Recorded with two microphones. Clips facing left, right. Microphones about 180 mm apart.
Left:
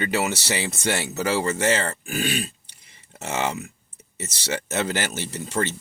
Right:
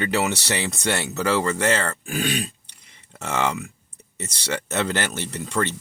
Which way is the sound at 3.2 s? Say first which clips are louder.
Right 2 dB; 60° right (ahead or behind).